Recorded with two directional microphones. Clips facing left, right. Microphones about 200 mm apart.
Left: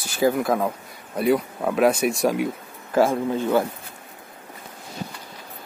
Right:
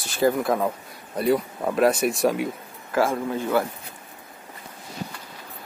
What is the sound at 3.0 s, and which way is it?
Speech, 15° left (ahead or behind).